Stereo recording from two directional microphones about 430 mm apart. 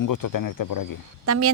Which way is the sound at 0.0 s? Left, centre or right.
Left.